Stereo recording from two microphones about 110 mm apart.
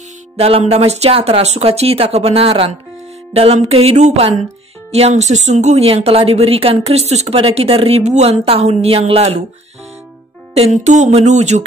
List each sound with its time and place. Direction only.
0.4 s speech: 65° right (ahead or behind)
7.3 s speech: 60° right (ahead or behind)
10.5 s music: 80° right